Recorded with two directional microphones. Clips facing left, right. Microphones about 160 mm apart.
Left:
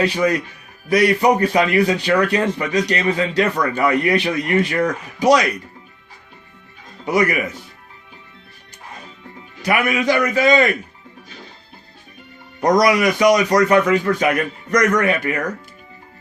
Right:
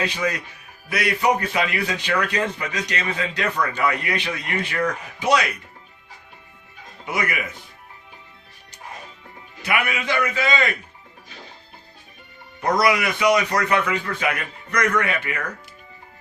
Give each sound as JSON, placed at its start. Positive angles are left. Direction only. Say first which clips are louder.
{"t": 0.0, "sound": "a man's voice", "louder": "left 7 dB", "side_deg": 35}
{"t": 7.0, "sound": "speech", "louder": "left 9 dB", "side_deg": 40}
{"t": 9.6, "sound": "a man's voice", "louder": "left 6 dB", "side_deg": 40}
{"t": 12.6, "sound": "a man's voice", "louder": "left 5 dB", "side_deg": 40}